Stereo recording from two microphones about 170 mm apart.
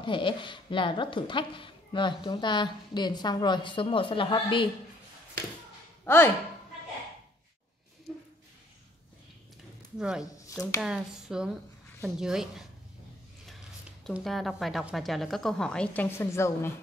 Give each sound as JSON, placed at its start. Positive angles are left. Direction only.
{"t": 0.0, "sound": "speech", "side_deg": 30}
{"t": 6.0, "sound": "speech", "side_deg": 15}
{"t": 9.9, "sound": "speech", "side_deg": -5}
{"t": 14.1, "sound": "speech", "side_deg": 0}